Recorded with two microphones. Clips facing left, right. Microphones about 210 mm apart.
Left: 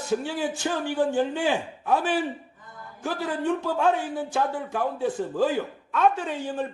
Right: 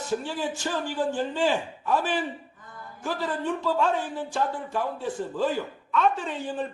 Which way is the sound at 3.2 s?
60° left (ahead or behind).